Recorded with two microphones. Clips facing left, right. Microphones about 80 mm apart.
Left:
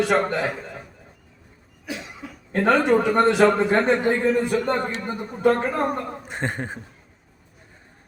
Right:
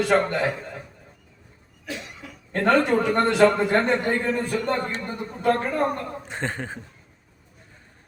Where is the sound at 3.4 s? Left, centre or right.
Centre.